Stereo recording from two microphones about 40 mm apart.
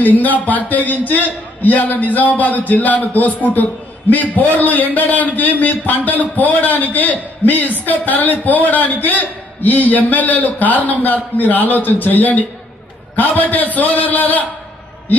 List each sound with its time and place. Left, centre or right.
0.0 s a man's voice: left